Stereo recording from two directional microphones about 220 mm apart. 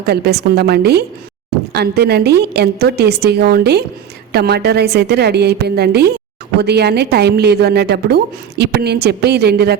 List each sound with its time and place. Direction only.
0.0 s a woman's voice: 45° right (ahead or behind)